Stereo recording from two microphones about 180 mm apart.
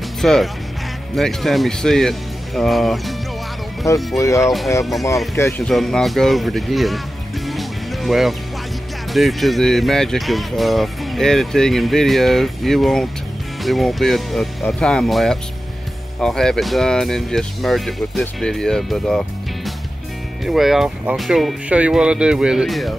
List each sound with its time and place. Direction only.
0.2 s speech: centre (ahead or behind)
4.2 s speech: 15° left (ahead or behind)
5.1 s speech: centre (ahead or behind)
7.4 s music: centre (ahead or behind)
9.1 s speech: centre (ahead or behind)